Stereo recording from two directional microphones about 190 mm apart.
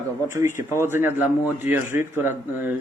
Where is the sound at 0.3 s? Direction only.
15° right (ahead or behind).